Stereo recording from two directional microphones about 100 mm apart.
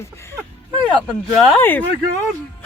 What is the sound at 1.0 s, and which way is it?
Speech, centre (ahead or behind).